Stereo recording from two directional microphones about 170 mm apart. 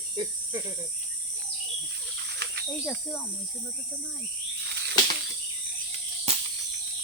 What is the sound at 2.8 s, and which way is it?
Speech, centre (ahead or behind).